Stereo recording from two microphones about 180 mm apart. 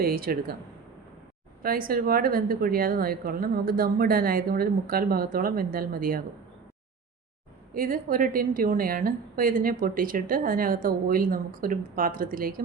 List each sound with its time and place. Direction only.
0.0 s a woman's voice: 55° right (ahead or behind)
1.6 s a woman's voice: 55° right (ahead or behind)
7.7 s a woman's voice: 50° right (ahead or behind)